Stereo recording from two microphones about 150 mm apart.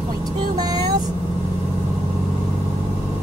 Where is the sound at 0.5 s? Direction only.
25° right (ahead or behind).